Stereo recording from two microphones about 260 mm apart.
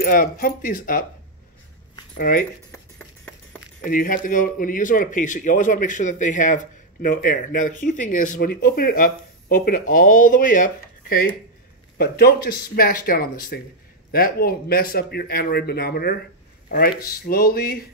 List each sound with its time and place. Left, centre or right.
0.0 s a man's voice: left
2.1 s speech: left
2.7 s a sound: centre
3.8 s a man's voice: left